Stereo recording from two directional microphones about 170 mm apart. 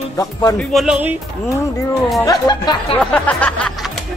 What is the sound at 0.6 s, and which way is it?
Speech, centre (ahead or behind).